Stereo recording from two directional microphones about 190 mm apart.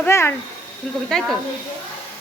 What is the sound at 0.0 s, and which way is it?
A woman's voice, 15° left (ahead or behind).